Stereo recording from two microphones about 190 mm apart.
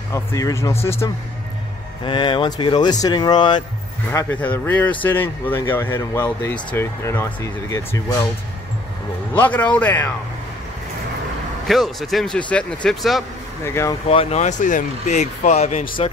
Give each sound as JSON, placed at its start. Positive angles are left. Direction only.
{"t": 0.1, "sound": "speech", "side_deg": 15}
{"t": 2.0, "sound": "speech", "side_deg": 25}
{"t": 4.1, "sound": "speech", "side_deg": 10}
{"t": 9.3, "sound": "speech", "side_deg": 10}
{"t": 11.6, "sound": "speech", "side_deg": 0}
{"t": 13.7, "sound": "speech", "side_deg": 15}
{"t": 14.0, "sound": "speech", "side_deg": 35}